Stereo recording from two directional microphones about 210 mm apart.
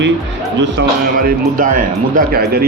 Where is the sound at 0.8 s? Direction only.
55° right (ahead or behind).